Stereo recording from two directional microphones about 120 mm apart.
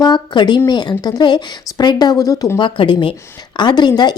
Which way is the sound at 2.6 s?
40° left (ahead or behind).